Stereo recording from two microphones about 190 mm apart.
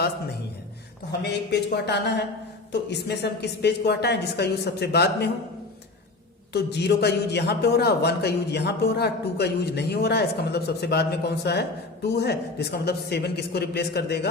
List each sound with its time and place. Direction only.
1.2 s a man's voice: 60° left (ahead or behind)
6.5 s a man's voice: 60° left (ahead or behind)